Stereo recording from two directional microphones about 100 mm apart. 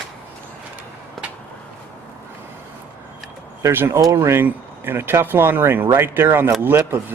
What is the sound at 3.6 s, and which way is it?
Speech, 30° right (ahead or behind).